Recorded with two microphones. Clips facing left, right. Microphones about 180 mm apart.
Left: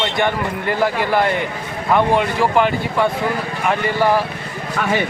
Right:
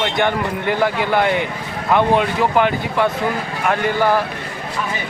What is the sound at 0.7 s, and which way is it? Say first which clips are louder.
Speech: even; centre (ahead or behind).